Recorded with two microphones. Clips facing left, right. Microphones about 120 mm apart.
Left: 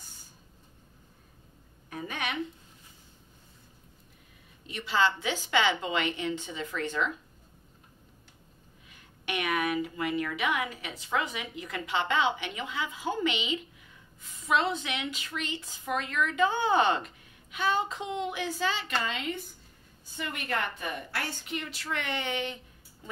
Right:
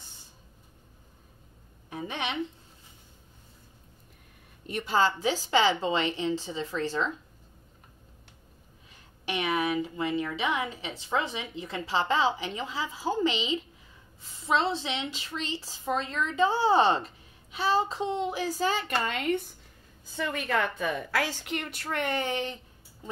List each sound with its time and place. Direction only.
1.9 s a woman's voice: 25° right (ahead or behind)
4.6 s a woman's voice: 45° right (ahead or behind); by 7.2 s 30° right (ahead or behind)
8.9 s a woman's voice: 30° right (ahead or behind); by 19.5 s 60° right (ahead or behind)
21.2 s a woman's voice: 85° right; by 22.6 s 35° right (ahead or behind)